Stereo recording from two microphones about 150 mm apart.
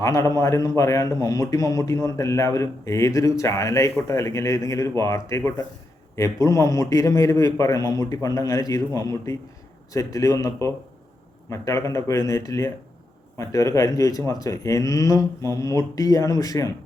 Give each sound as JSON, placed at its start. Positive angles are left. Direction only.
{"t": 0.0, "sound": "a man's voice", "side_deg": 20}